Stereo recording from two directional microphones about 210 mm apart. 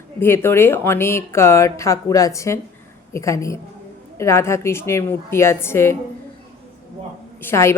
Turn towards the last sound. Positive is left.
turn(degrees=10)  # may be behind; listen again after turning